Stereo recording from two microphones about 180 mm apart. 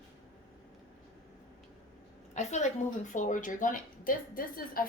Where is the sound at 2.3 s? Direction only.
40° left (ahead or behind).